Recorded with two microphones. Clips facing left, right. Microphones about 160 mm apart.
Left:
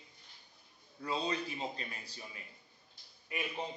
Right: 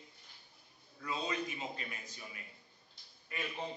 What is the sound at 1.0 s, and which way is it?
A man's voice, 30° left (ahead or behind).